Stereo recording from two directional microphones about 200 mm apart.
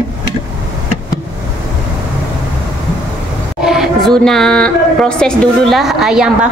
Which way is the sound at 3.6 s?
Centre (ahead or behind).